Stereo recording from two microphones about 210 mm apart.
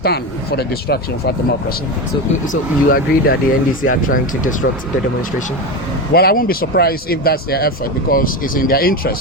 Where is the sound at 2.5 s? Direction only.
45° left (ahead or behind).